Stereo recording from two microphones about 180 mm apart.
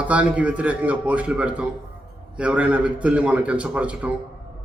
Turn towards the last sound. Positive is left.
turn(degrees=-5)  # may be behind; listen again after turning